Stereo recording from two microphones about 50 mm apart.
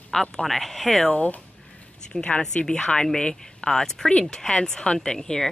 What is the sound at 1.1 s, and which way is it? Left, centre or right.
A woman's voice, left.